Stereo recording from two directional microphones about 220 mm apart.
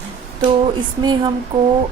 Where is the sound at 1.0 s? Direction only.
20° right (ahead or behind).